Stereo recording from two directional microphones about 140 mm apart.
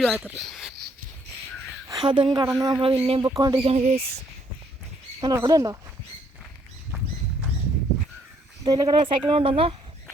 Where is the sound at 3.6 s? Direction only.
50° right (ahead or behind).